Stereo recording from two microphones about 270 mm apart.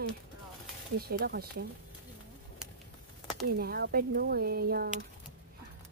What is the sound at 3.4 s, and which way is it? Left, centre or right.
Speech, right.